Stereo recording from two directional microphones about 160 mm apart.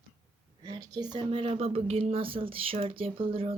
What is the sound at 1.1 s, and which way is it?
Speech, 35° right (ahead or behind).